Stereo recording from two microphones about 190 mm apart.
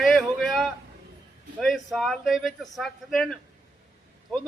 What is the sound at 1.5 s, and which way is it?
Speech, centre (ahead or behind).